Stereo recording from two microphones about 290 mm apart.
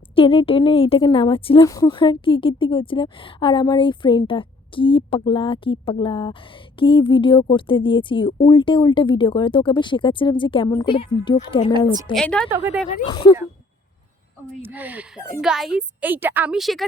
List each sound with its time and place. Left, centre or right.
0.2 s a woman's voice: centre
12.1 s speech: centre
12.9 s a woman's voice: centre
14.6 s speech: centre